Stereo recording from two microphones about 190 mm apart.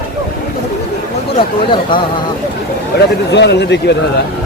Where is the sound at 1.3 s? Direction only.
25° left (ahead or behind).